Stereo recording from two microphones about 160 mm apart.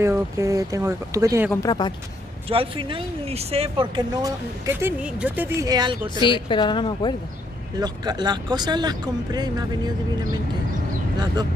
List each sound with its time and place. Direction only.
0.0 s speech: 20° right (ahead or behind)
1.5 s a woman's voice: 25° left (ahead or behind)
2.5 s speech: 35° right (ahead or behind)
5.0 s speech: 10° right (ahead or behind); by 6.2 s 25° right (ahead or behind)
6.2 s a woman's voice: 30° left (ahead or behind)
7.8 s speech: 25° right (ahead or behind)